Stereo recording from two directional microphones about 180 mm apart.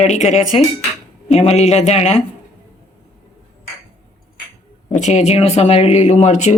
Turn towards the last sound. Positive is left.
turn(degrees=40)  # may be behind; listen again after turning